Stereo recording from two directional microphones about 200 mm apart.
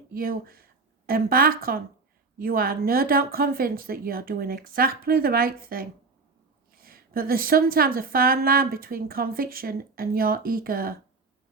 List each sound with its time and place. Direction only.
0.1 s a woman's voice: 45° right (ahead or behind)